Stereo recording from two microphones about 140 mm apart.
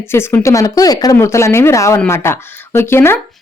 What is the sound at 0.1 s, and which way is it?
Speech, 15° left (ahead or behind).